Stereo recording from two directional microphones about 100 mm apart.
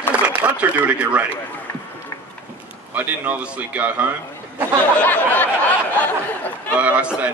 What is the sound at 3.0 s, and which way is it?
Speech, 15° right (ahead or behind).